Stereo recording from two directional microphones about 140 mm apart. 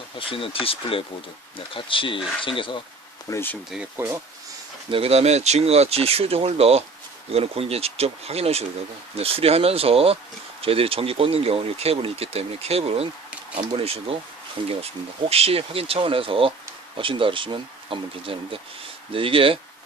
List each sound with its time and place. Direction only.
0.2 s speech: 40° left (ahead or behind)
3.2 s speech: 15° left (ahead or behind)
3.9 s speech: 15° right (ahead or behind)
4.9 s speech: 45° right (ahead or behind)